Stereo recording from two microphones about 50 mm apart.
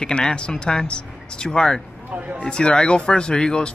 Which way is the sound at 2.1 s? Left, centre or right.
Right.